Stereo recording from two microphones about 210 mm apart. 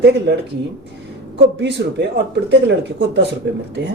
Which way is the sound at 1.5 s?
55° right (ahead or behind).